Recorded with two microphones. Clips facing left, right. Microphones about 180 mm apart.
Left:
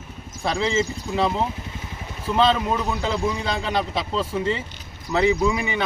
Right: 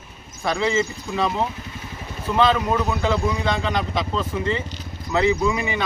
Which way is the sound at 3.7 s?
30° left (ahead or behind).